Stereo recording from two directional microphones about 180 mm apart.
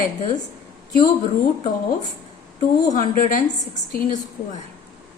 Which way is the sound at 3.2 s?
50° left (ahead or behind).